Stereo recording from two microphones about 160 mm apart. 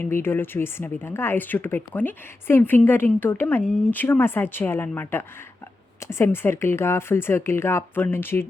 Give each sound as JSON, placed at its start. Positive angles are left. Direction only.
{"t": 0.0, "sound": "speech", "side_deg": 15}